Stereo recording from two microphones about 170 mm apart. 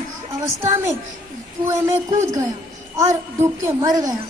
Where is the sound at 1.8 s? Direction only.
15° right (ahead or behind).